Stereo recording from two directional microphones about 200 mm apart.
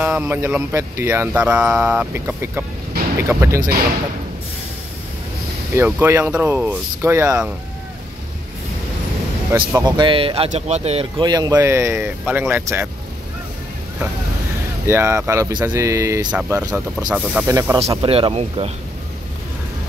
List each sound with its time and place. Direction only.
0.0 s speech: 10° right (ahead or behind)
5.8 s speech: 10° right (ahead or behind)
9.5 s speech: 15° right (ahead or behind)
14.9 s speech: 15° right (ahead or behind)
17.7 s speech: 30° right (ahead or behind)